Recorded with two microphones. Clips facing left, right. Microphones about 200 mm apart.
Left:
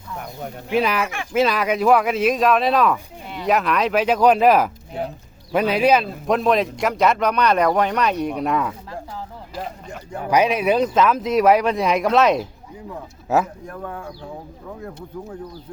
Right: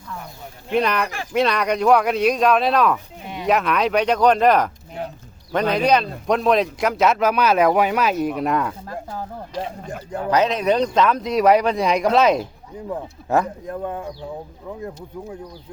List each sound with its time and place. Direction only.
0.7 s speech: 5° left (ahead or behind)
10.2 s speech: 10° left (ahead or behind)
13.7 s speech: 20° right (ahead or behind)